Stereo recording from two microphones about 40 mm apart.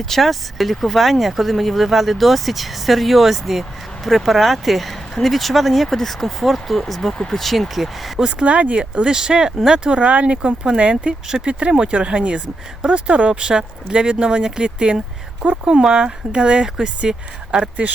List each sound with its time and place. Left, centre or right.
0.0 s speech: centre
8.2 s speech: centre
8.4 s speech: right; by 9.7 s centre
9.7 s speech: right
10.3 s speech: right
11.3 s speech: centre
11.8 s speech: right